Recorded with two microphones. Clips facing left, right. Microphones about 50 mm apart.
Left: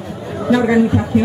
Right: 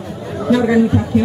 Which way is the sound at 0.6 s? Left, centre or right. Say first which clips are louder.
Even; centre.